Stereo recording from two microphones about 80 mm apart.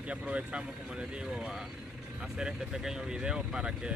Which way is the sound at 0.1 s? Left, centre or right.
Centre.